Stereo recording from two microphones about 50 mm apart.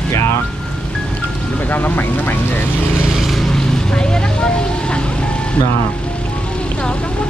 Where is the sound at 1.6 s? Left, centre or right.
Left.